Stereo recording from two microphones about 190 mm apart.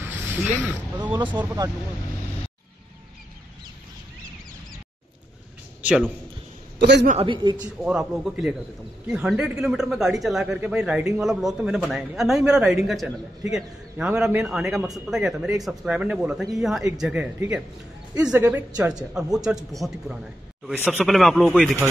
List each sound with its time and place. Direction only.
0.0 s a sound: 10° right (ahead or behind)
0.9 s speech: 10° right (ahead or behind)
5.8 s a sound: 5° right (ahead or behind)
6.8 s a man's voice: 65° right (ahead or behind)
7.1 s speech: 30° right (ahead or behind)
7.8 s a man's voice: centre (ahead or behind)